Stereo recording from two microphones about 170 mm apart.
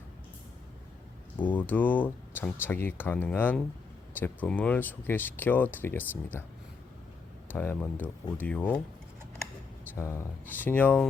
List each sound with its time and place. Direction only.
1.4 s speech: 10° left (ahead or behind)
7.5 s speech: 10° left (ahead or behind)
9.9 s speech: 15° left (ahead or behind)